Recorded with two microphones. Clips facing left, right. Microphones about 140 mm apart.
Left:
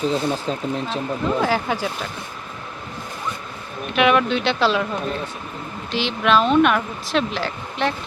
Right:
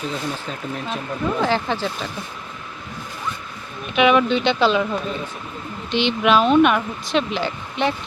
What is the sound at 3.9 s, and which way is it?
Speech, centre (ahead or behind).